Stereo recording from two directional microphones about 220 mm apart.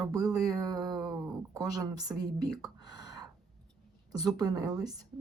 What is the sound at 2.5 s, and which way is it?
Whispering, 15° right (ahead or behind).